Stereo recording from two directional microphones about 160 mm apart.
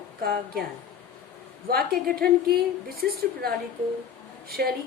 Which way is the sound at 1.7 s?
70° right (ahead or behind).